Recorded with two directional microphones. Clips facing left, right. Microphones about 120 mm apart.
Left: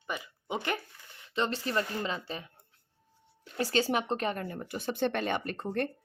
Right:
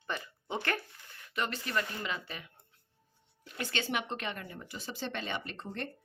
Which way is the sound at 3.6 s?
35° left (ahead or behind).